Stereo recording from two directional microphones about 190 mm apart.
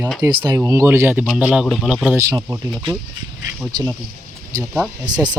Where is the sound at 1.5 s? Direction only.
Centre (ahead or behind).